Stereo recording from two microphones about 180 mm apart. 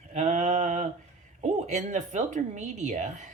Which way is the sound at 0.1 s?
40° right (ahead or behind).